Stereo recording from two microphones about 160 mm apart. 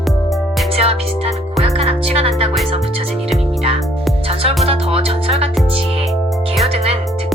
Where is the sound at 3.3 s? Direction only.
Centre (ahead or behind).